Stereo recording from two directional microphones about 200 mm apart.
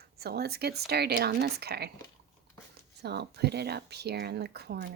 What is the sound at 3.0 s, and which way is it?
Speech, 55° right (ahead or behind).